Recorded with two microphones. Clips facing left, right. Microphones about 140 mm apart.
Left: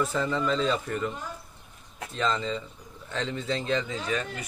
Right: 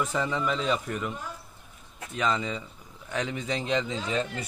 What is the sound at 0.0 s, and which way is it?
Speech, 15° right (ahead or behind).